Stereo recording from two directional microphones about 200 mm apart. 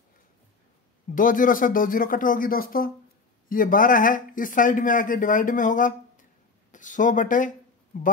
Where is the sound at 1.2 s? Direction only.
45° left (ahead or behind).